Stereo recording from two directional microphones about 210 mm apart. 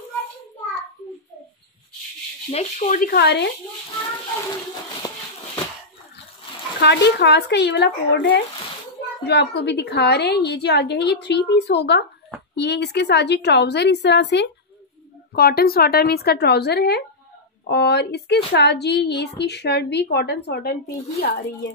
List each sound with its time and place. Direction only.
2.5 s speech: 35° left (ahead or behind); by 3.4 s 50° left (ahead or behind)
5.0 s a sound: 15° left (ahead or behind)
6.8 s speech: 55° left (ahead or behind)